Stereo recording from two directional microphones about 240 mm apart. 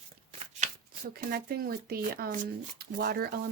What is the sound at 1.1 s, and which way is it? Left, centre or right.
Speech, right.